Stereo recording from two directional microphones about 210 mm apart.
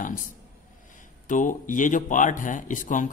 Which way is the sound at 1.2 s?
40° left (ahead or behind).